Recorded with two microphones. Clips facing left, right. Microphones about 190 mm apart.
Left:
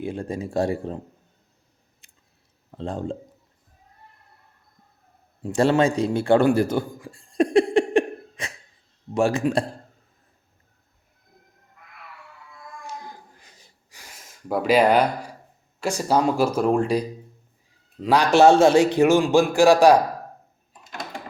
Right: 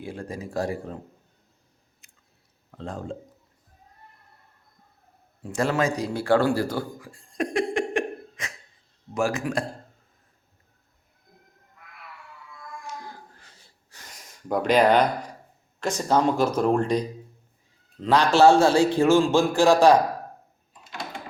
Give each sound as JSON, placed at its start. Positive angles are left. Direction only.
{"t": 0.0, "sound": "speech", "side_deg": 25}
{"t": 2.0, "sound": "chewing", "side_deg": 30}
{"t": 2.7, "sound": "speech", "side_deg": 30}
{"t": 5.4, "sound": "a sound", "side_deg": 30}
{"t": 9.1, "sound": "speech", "side_deg": 30}
{"t": 13.3, "sound": "a sound", "side_deg": 15}
{"t": 15.8, "sound": "a man's voice", "side_deg": 10}